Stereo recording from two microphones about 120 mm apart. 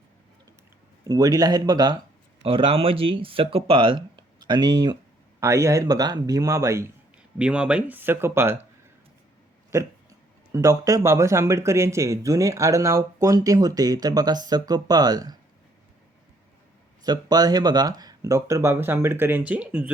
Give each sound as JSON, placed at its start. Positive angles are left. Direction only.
{"t": 1.0, "sound": "speech", "side_deg": -30}
{"t": 2.4, "sound": "speech", "side_deg": -50}
{"t": 7.3, "sound": "speech", "side_deg": -10}
{"t": 9.7, "sound": "speech", "side_deg": -30}
{"t": 17.0, "sound": "speech", "side_deg": -35}